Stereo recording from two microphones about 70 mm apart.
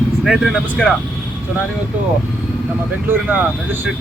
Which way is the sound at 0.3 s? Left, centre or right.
Centre.